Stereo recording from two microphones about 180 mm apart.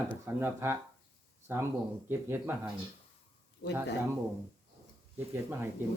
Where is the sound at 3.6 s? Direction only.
60° left (ahead or behind).